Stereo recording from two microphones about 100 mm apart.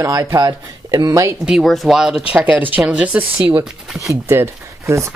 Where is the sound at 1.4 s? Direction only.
Centre (ahead or behind).